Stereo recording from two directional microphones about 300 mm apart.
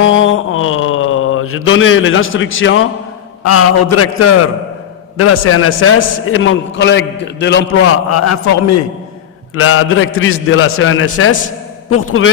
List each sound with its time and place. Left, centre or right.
0.0 s a sound: left
3.4 s a man's voice: left
6.2 s a man's voice: left
7.6 s a man's voice: left
9.6 s a man's voice: left